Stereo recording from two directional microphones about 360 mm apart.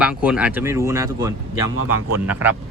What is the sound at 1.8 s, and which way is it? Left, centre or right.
Speech, right.